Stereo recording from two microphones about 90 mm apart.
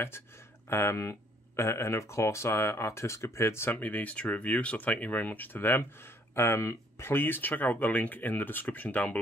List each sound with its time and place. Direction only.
0.7 s speech: 30° left (ahead or behind)
3.7 s speech: 20° left (ahead or behind)